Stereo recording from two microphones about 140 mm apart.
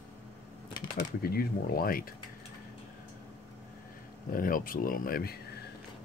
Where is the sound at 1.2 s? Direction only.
90° left.